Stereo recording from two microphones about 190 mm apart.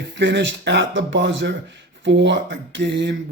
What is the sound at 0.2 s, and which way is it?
Speech, 70° right (ahead or behind).